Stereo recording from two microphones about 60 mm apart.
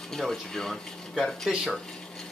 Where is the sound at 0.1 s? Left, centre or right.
Centre.